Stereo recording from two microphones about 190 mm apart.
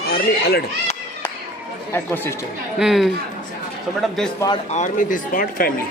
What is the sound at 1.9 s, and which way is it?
Speech, 10° left (ahead or behind).